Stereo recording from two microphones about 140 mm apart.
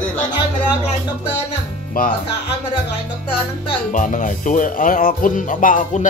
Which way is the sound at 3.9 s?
65° left (ahead or behind).